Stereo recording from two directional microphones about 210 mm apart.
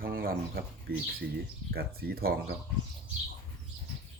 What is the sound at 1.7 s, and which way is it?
Speech, 45° right (ahead or behind).